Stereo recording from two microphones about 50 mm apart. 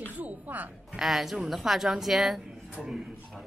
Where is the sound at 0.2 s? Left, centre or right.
Right.